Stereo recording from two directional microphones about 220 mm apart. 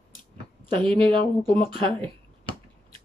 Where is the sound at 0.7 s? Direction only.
25° right (ahead or behind).